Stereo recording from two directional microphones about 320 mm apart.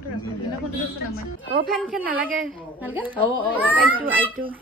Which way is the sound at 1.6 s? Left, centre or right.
Centre.